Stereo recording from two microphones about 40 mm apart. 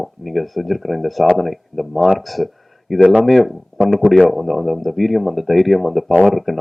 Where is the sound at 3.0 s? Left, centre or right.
Right.